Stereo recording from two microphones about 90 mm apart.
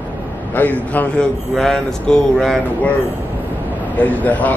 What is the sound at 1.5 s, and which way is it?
Speech, 5° left (ahead or behind).